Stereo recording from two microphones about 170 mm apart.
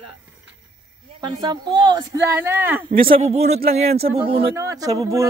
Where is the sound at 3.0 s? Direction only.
35° right (ahead or behind).